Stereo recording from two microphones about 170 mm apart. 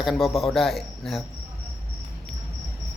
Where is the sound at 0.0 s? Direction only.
Centre (ahead or behind).